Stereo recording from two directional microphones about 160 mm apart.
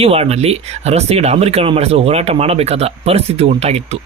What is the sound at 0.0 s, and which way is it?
Speech, 40° right (ahead or behind).